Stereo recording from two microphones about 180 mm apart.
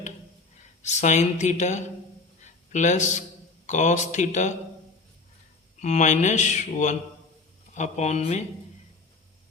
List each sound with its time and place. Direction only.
0.8 s speech: 40° left (ahead or behind)
2.4 s a sound: 40° left (ahead or behind)
3.7 s speech: 40° left (ahead or behind)
5.8 s speech: 40° left (ahead or behind)